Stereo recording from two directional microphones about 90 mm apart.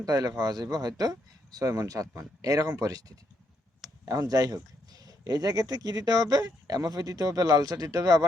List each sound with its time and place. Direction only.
0.0 s speech: 45° right (ahead or behind)
4.1 s speech: 40° right (ahead or behind)